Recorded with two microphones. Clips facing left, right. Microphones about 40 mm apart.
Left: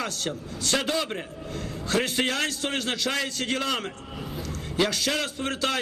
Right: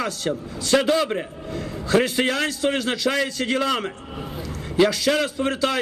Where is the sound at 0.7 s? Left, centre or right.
Right.